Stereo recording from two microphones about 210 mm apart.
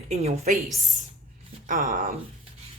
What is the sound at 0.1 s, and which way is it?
Speech, 30° right (ahead or behind).